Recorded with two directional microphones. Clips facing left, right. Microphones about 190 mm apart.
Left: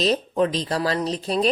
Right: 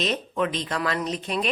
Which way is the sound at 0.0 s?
35° left (ahead or behind).